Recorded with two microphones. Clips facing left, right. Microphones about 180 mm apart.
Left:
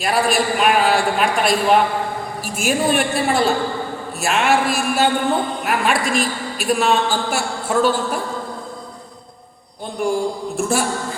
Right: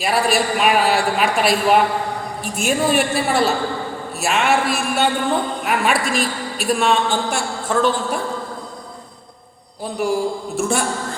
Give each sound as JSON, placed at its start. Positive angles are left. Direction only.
{"t": 0.0, "sound": "a woman's voice", "side_deg": 0}
{"t": 10.0, "sound": "a woman's voice", "side_deg": -5}